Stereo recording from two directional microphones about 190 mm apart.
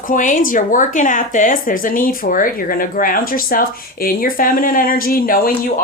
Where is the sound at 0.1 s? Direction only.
45° left (ahead or behind).